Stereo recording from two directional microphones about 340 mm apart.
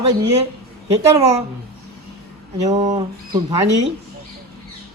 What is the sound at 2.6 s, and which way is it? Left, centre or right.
Speech, centre.